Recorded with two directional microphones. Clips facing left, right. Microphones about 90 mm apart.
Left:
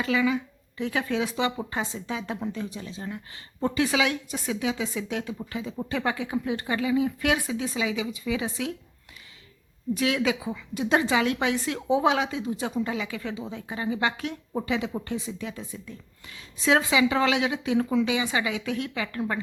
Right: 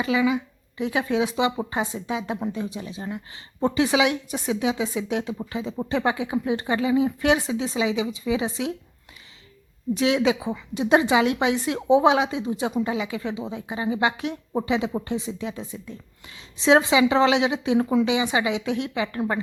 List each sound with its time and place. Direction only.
0.0 s a woman's voice: 15° right (ahead or behind)
9.9 s a woman's voice: 20° right (ahead or behind)